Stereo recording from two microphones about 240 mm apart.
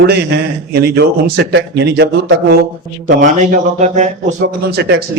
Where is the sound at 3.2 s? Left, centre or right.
Right.